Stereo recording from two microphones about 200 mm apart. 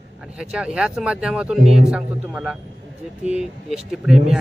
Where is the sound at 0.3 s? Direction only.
5° right (ahead or behind).